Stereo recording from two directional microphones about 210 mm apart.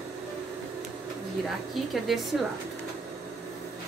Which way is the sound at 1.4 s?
Centre (ahead or behind).